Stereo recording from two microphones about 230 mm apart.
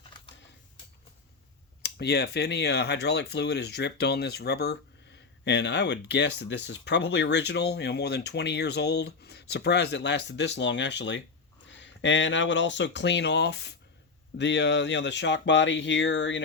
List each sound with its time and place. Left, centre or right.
1.8 s speech: left